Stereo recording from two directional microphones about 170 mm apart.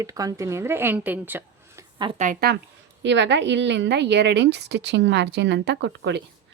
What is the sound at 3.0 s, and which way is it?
A woman's voice, 90° right.